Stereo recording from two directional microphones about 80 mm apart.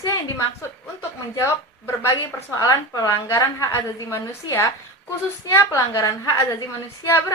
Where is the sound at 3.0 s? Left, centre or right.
Left.